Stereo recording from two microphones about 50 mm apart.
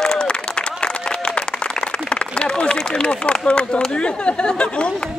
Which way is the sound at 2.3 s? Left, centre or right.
Centre.